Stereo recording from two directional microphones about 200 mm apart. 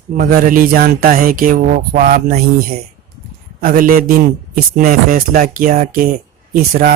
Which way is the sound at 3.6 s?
45° right (ahead or behind).